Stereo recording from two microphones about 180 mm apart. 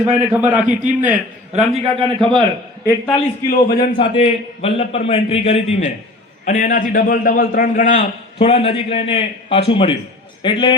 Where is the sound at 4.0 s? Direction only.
35° left (ahead or behind).